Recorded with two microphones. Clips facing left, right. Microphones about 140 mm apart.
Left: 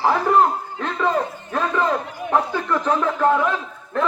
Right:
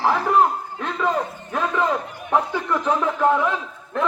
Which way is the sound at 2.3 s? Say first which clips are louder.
Left 1 dB; 15° right (ahead or behind).